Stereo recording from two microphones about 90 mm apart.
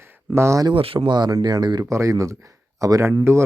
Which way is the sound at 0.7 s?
85° right.